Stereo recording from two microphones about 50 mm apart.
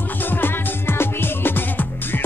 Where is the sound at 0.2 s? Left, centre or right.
Left.